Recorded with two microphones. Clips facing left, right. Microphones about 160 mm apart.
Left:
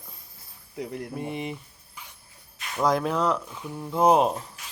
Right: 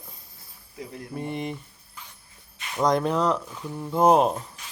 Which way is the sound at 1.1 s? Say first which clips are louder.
Right 5 dB; centre (ahead or behind).